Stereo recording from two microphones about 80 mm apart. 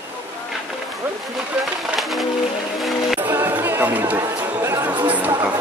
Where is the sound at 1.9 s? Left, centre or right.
Centre.